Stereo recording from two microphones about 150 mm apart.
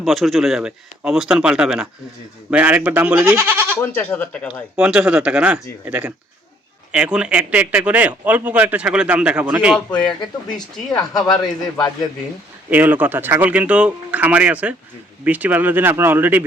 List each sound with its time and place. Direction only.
0.0 s a man's voice: centre (ahead or behind)
3.8 s speech: 15° left (ahead or behind)
4.8 s a man's voice: 5° right (ahead or behind)
9.9 s speech: 30° left (ahead or behind)
10.9 s speech: 5° left (ahead or behind)
12.7 s a man's voice: 10° right (ahead or behind)